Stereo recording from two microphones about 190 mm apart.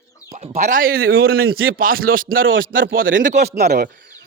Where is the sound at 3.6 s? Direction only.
60° right (ahead or behind).